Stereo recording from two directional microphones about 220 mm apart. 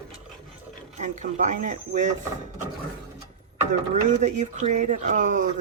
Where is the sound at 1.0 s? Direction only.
35° right (ahead or behind).